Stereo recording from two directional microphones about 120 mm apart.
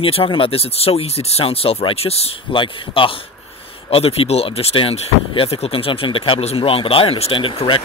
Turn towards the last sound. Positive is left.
turn(degrees=45)  # may be behind; listen again after turning